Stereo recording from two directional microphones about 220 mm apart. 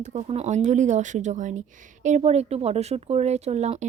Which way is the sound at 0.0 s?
30° right (ahead or behind).